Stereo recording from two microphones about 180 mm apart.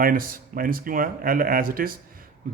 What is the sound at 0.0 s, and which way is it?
A man's voice, 50° right (ahead or behind).